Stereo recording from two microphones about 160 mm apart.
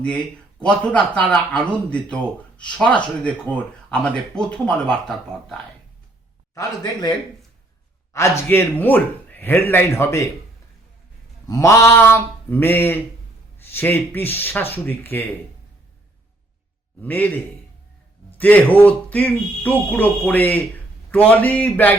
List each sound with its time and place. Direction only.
0.6 s speech: 5° left (ahead or behind)
6.5 s a man's voice: 20° left (ahead or behind)
8.1 s speech: 20° left (ahead or behind)
11.4 s speech: 20° left (ahead or behind)
17.0 s speech: 10° left (ahead or behind)
18.3 s speech: 10° left (ahead or behind)